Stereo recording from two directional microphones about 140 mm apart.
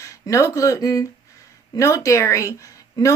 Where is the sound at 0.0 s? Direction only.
25° left (ahead or behind).